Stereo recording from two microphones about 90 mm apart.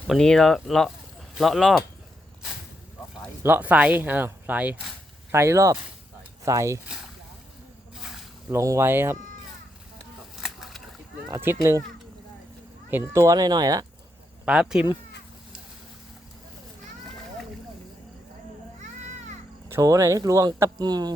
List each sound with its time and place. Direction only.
0.1 s speech: 5° left (ahead or behind)
3.4 s speech: 20° right (ahead or behind)
5.3 s speech: 30° right (ahead or behind)
6.8 s speech: 5° right (ahead or behind)
8.4 s speech: 35° right (ahead or behind)
10.4 s a sound: centre (ahead or behind)
11.3 s speech: 30° right (ahead or behind)
13.0 s speech: 35° right (ahead or behind)
14.4 s speech: 10° right (ahead or behind)
19.6 s speech: 35° right (ahead or behind); by 21.2 s 50° right (ahead or behind)